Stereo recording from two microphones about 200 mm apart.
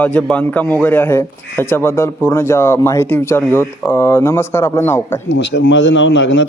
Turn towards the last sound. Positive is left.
turn(degrees=65)  # may be behind; listen again after turning